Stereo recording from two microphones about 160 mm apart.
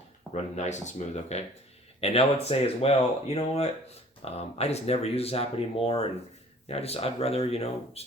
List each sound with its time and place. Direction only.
0.3 s speech: 45° left (ahead or behind)